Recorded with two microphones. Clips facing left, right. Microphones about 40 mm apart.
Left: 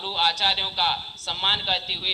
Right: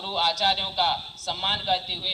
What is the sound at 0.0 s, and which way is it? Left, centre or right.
A man's voice, left.